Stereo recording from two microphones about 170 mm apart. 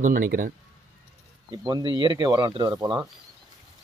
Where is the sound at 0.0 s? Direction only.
55° right (ahead or behind).